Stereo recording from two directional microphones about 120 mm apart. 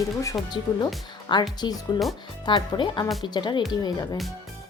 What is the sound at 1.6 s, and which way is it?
A woman's voice, 30° left (ahead or behind).